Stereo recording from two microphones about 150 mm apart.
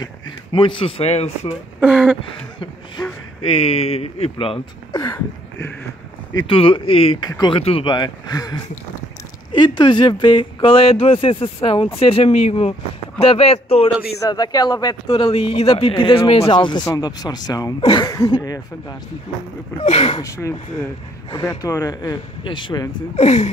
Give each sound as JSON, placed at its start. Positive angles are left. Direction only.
{"t": 0.0, "sound": "speech", "side_deg": 35}
{"t": 1.8, "sound": "speech", "side_deg": -5}
{"t": 3.4, "sound": "speech", "side_deg": 40}
{"t": 4.9, "sound": "speech", "side_deg": 20}
{"t": 6.3, "sound": "speech", "side_deg": 35}
{"t": 7.2, "sound": "speech", "side_deg": 25}
{"t": 7.5, "sound": "speech", "side_deg": 35}
{"t": 14.2, "sound": "speech", "side_deg": 25}
{"t": 19.8, "sound": "speech", "side_deg": 45}
{"t": 20.2, "sound": "speech", "side_deg": 20}
{"t": 22.4, "sound": "speech", "side_deg": 30}
{"t": 23.1, "sound": "speech", "side_deg": 50}